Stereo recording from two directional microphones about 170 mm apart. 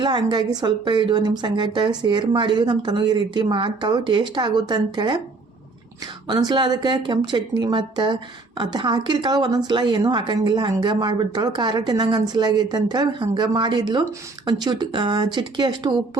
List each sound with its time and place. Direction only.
0.0 s speech: 25° right (ahead or behind)
6.2 s speech: 25° right (ahead or behind)